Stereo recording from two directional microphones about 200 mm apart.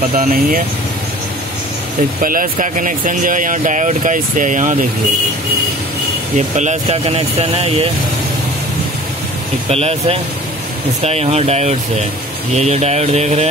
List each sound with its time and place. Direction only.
0.1 s speech: 45° right (ahead or behind)
2.2 s speech: 45° right (ahead or behind)
6.3 s speech: 35° right (ahead or behind)
9.7 s speech: 30° right (ahead or behind)